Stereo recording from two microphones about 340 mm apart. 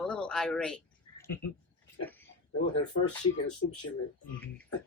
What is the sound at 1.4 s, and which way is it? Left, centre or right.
Speech, left.